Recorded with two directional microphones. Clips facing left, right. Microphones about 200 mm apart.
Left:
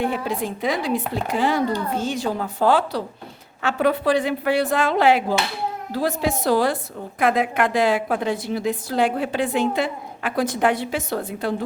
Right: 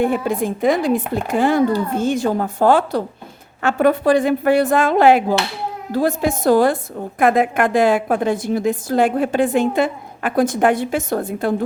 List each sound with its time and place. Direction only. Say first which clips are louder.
0.0 s a woman's voice: right 6 dB; 50° right (ahead or behind)